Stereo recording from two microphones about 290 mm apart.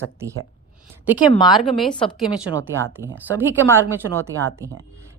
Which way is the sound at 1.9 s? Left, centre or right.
Centre.